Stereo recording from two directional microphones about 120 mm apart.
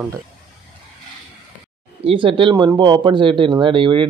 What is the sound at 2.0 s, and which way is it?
Speech, 45° right (ahead or behind).